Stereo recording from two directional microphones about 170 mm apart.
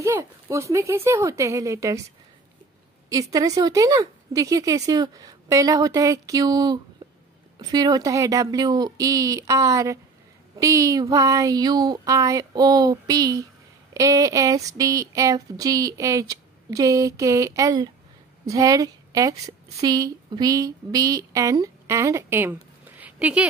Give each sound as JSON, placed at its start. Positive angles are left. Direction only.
{"t": 0.0, "sound": "speech", "side_deg": -15}
{"t": 3.1, "sound": "a sound", "side_deg": -20}
{"t": 18.5, "sound": "a woman's voice", "side_deg": -20}